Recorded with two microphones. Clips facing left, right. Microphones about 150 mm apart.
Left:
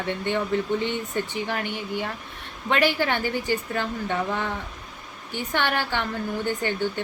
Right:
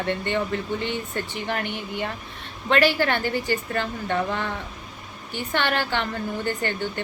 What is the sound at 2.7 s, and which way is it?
A woman's voice, 15° left (ahead or behind).